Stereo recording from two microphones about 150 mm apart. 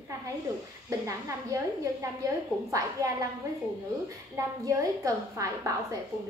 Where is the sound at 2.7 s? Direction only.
20° right (ahead or behind).